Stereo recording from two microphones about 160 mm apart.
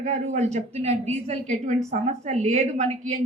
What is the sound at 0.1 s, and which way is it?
A woman's voice, 45° right (ahead or behind).